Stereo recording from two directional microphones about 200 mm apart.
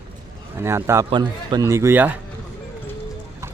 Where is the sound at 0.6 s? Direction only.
15° right (ahead or behind).